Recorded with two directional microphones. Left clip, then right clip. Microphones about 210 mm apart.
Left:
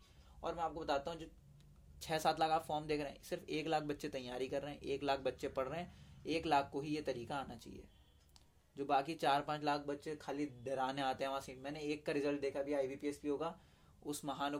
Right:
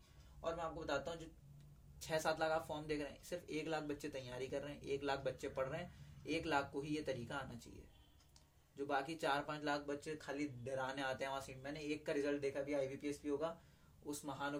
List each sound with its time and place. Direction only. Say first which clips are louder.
0.4 s a man's voice: left 3 dB; 40° left (ahead or behind)
8.7 s speech: left 5 dB; 40° left (ahead or behind)
10.2 s speech: left 3 dB; 15° left (ahead or behind)
10.6 s speech: left 6 dB; 40° left (ahead or behind)